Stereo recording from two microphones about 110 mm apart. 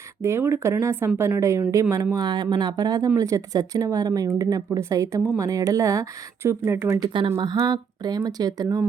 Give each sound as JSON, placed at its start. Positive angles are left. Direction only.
{"t": 0.2, "sound": "speech", "side_deg": -25}
{"t": 2.1, "sound": "speech", "side_deg": -40}
{"t": 7.0, "sound": "speech", "side_deg": -50}
{"t": 7.6, "sound": "speech", "side_deg": -40}